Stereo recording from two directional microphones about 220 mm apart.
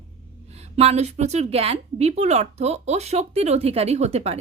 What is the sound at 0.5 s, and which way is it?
A woman's voice, 30° right (ahead or behind).